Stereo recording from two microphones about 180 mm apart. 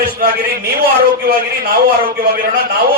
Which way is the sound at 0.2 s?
50° right (ahead or behind).